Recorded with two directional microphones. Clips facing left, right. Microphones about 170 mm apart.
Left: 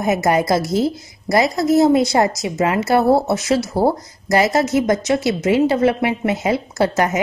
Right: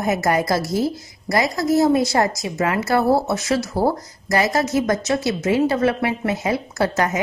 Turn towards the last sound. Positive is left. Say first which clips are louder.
# left 3 dB
turn(degrees=20)  # may be behind; listen again after turning